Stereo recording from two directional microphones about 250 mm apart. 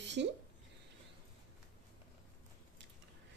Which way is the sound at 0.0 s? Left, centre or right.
Right.